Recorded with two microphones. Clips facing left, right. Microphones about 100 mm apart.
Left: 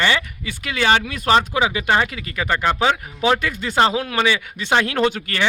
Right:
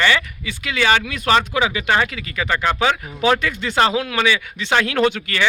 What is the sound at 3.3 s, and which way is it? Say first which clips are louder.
Speech: even; 40° left (ahead or behind).